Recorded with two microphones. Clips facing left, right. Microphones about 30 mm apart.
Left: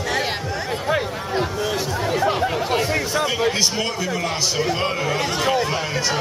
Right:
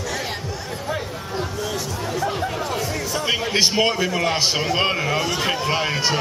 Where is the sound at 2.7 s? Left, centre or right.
Left.